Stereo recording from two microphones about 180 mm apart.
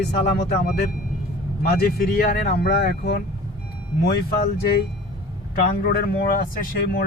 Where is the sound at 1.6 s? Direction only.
55° left (ahead or behind).